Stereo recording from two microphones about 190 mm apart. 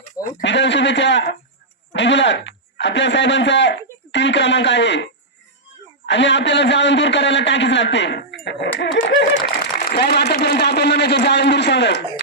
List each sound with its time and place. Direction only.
0.0 s a sound: 40° left (ahead or behind)
0.4 s a man's voice: 70° left (ahead or behind)
6.1 s a man's voice: 70° left (ahead or behind)
9.9 s speech: 60° left (ahead or behind)